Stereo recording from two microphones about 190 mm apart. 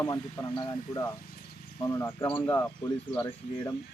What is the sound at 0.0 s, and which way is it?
Speech, 20° left (ahead or behind).